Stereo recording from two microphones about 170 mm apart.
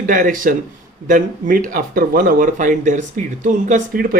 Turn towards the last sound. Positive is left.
turn(degrees=-55)  # may be behind; listen again after turning